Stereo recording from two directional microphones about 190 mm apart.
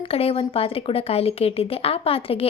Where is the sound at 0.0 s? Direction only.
30° left (ahead or behind).